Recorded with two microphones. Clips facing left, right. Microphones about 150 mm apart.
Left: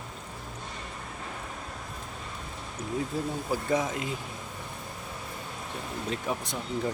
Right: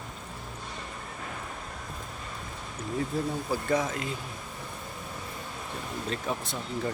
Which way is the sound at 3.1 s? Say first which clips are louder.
Right 1 dB; 15° left (ahead or behind).